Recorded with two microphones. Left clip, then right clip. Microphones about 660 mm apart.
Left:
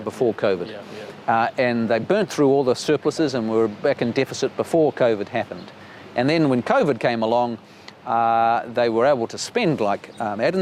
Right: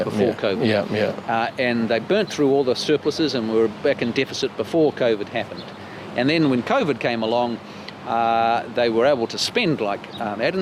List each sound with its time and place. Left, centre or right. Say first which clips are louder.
0.2 s speech: left 2 dB; left
9.8 s speech: left 2 dB; left